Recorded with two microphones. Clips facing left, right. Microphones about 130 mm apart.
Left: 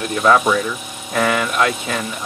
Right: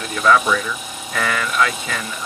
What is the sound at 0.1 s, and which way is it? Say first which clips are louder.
Speech: left 2 dB; 25° left (ahead or behind).